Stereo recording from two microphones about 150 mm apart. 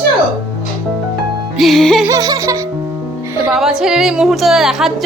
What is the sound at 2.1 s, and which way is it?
Music, 25° right (ahead or behind).